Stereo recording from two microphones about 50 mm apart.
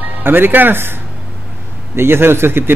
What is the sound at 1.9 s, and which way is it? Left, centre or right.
Speech, right.